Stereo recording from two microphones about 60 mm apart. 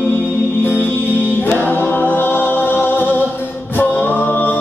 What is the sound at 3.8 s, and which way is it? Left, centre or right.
Music, left.